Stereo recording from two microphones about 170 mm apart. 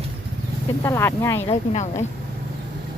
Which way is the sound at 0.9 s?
15° left (ahead or behind).